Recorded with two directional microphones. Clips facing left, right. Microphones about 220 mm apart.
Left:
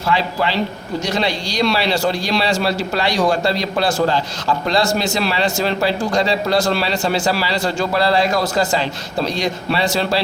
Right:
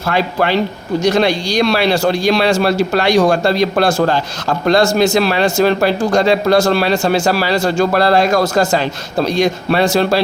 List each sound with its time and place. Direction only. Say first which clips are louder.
0.1 s a man's voice: right 4 dB; 55° right (ahead or behind)